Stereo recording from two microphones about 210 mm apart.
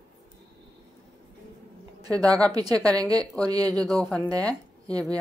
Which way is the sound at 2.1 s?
5° left (ahead or behind).